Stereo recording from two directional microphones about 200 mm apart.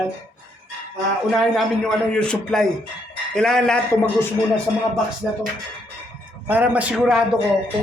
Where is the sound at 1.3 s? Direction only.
Centre (ahead or behind).